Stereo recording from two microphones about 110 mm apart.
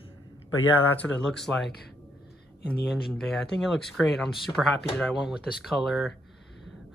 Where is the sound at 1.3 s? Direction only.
5° left (ahead or behind).